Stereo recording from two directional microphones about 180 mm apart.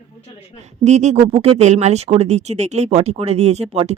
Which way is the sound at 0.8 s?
40° right (ahead or behind).